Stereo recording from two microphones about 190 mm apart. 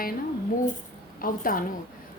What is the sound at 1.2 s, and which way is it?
Speech, 45° left (ahead or behind).